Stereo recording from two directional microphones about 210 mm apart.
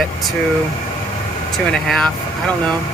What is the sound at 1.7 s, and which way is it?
Speech, centre (ahead or behind).